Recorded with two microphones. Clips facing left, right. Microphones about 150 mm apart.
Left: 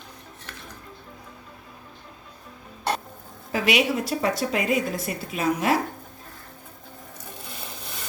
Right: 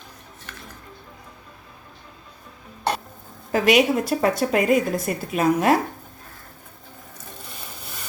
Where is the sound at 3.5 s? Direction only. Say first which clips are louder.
Right 5 dB; 45° right (ahead or behind).